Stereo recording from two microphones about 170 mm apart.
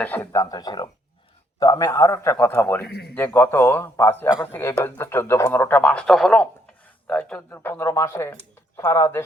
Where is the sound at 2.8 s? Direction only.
70° left (ahead or behind).